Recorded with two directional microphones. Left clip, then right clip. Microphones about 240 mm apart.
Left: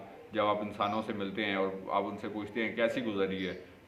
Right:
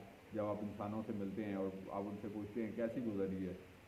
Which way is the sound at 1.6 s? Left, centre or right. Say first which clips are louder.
Left 12 dB; centre.